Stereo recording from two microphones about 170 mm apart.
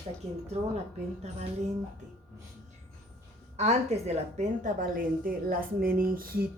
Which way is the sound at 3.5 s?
40° right (ahead or behind).